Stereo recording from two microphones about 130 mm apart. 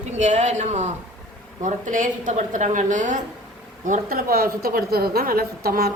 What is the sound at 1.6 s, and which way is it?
A woman's voice, 75° right (ahead or behind).